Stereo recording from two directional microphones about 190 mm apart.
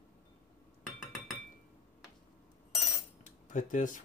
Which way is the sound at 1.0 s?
Centre (ahead or behind).